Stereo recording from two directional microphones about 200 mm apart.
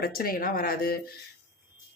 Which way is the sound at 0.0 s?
45° left (ahead or behind).